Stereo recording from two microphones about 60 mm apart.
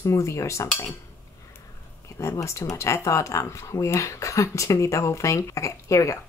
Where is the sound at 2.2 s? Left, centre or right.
Left.